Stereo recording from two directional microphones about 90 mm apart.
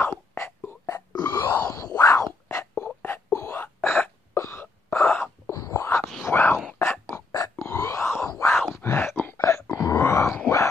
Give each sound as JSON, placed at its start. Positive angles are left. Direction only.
{"t": 0.0, "sound": "whispering", "side_deg": 25}
{"t": 1.1, "sound": "wail", "side_deg": 50}
{"t": 1.5, "sound": "a sound", "side_deg": 40}
{"t": 2.0, "sound": "whispering", "side_deg": 35}
{"t": 2.4, "sound": "a sound", "side_deg": 20}
{"t": 3.3, "sound": "wail", "side_deg": 30}
{"t": 5.5, "sound": "a sound", "side_deg": 35}
{"t": 9.4, "sound": "wail", "side_deg": 35}
{"t": 9.9, "sound": "groan", "side_deg": 30}